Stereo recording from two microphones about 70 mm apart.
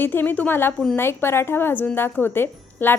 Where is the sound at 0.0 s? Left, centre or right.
Left.